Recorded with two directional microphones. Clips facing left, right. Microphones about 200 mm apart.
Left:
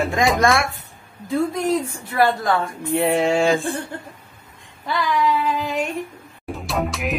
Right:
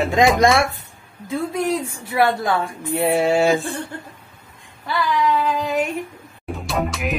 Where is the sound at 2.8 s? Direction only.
5° right (ahead or behind).